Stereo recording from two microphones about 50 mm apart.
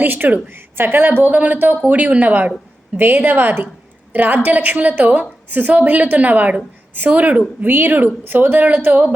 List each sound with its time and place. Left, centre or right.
0.0 s a woman's voice: right
7.7 s a woman's voice: right